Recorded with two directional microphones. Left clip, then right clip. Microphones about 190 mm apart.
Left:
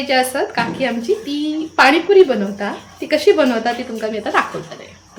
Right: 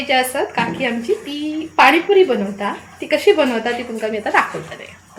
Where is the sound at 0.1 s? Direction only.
Centre (ahead or behind).